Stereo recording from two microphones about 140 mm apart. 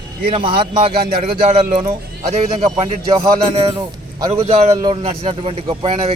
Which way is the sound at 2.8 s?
35° right (ahead or behind).